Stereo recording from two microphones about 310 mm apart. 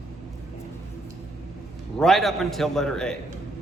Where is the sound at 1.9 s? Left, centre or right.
Centre.